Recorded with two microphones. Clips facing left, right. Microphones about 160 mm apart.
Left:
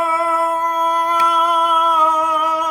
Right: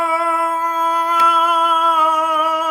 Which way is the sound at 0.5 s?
10° right (ahead or behind).